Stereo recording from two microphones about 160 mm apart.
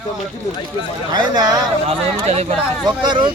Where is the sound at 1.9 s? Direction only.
40° right (ahead or behind).